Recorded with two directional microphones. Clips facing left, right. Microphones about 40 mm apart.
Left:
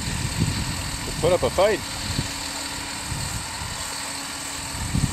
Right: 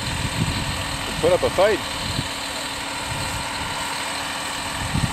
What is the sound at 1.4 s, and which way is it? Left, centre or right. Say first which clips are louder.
Speech: right 2 dB; right.